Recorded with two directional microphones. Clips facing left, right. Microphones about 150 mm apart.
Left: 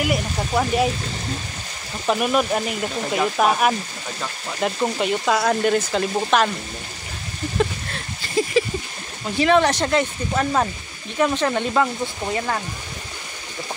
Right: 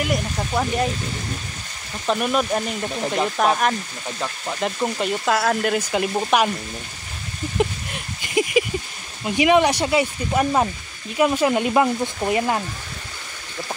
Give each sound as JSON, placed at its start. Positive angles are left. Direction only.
{"t": 0.0, "sound": "speech", "side_deg": 5}
{"t": 2.0, "sound": "speech", "side_deg": 5}
{"t": 7.5, "sound": "a sound", "side_deg": -15}
{"t": 9.2, "sound": "speech", "side_deg": -15}